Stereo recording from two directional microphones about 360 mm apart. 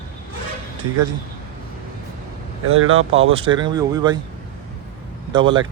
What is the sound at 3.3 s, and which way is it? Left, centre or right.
Speech, centre.